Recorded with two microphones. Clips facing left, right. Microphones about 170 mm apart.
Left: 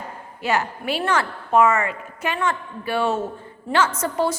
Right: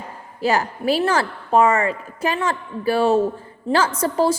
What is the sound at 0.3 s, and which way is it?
A woman's voice, 35° right (ahead or behind).